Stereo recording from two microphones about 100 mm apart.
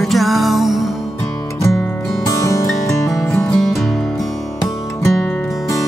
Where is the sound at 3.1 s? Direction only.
5° left (ahead or behind).